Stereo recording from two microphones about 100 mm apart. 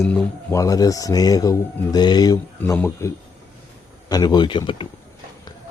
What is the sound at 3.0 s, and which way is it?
Speech, 25° left (ahead or behind).